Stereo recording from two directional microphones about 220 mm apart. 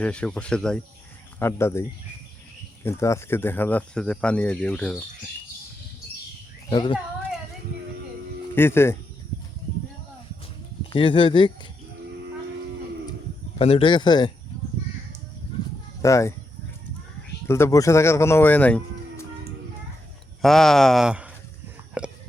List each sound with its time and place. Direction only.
0.0 s speech: 5° left (ahead or behind)
2.8 s speech: 10° left (ahead or behind)
6.7 s speech: 20° left (ahead or behind)
8.5 s speech: 10° left (ahead or behind)
10.8 s speech: 25° left (ahead or behind)
13.6 s speech: 25° left (ahead or behind)
16.0 s speech: 15° left (ahead or behind)
17.5 s speech: 15° left (ahead or behind)
20.4 s speech: centre (ahead or behind)
22.0 s biting: 5° right (ahead or behind)